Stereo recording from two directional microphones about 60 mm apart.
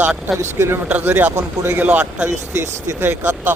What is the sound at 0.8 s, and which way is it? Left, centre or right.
Speech, right.